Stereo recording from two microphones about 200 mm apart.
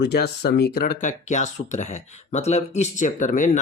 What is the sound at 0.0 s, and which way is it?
Speech, 55° left (ahead or behind).